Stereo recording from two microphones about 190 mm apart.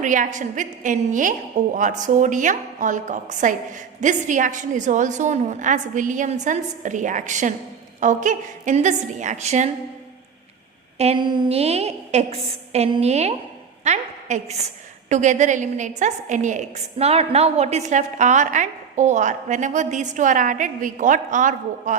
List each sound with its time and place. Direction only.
0.0 s a woman's voice: 40° right (ahead or behind)
10.9 s a woman's voice: 35° right (ahead or behind)